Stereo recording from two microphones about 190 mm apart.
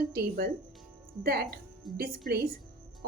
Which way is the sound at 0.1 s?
55° right (ahead or behind).